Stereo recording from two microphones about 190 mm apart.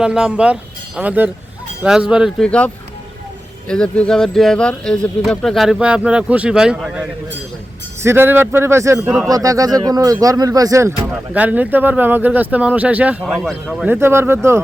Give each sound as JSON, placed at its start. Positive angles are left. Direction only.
{"t": 0.0, "sound": "speech", "side_deg": -5}
{"t": 8.0, "sound": "speech", "side_deg": -10}